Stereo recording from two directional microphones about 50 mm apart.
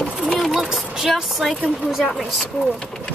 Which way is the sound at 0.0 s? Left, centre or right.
Right.